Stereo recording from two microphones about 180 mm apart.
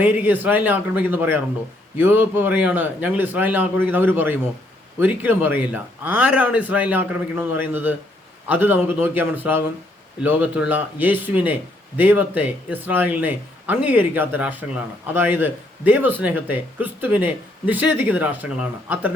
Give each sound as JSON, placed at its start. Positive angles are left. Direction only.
{"t": 0.0, "sound": "speech", "side_deg": -10}